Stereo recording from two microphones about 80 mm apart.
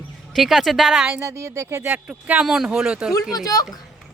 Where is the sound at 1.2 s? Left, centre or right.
Right.